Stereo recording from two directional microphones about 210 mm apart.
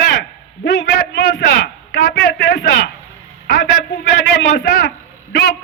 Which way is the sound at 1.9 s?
55° left (ahead or behind).